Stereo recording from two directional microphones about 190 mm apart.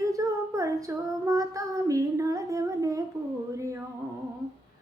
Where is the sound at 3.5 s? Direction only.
15° right (ahead or behind).